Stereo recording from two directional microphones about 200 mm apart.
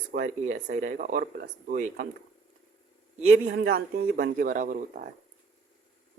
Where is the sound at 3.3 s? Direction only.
65° right (ahead or behind).